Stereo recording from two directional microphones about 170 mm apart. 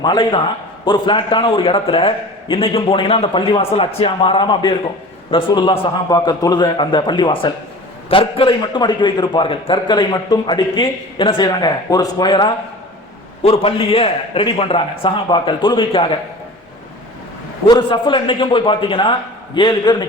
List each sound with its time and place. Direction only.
0.0 s a man's voice: 25° left (ahead or behind)
17.7 s a man's voice: 25° left (ahead or behind)